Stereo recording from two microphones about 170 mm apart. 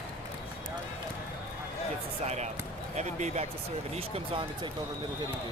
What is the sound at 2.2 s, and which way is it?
Speech, 40° right (ahead or behind).